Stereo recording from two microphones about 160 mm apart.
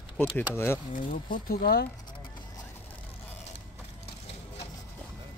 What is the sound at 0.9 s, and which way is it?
Speech, 60° left (ahead or behind).